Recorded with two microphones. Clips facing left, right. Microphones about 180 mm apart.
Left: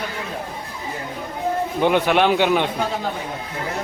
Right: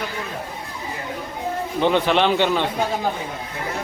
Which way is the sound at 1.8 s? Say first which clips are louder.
Left 1 dB; 10° left (ahead or behind).